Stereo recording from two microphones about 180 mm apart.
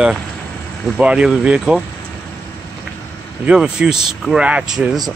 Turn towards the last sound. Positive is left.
turn(degrees=-5)  # may be behind; listen again after turning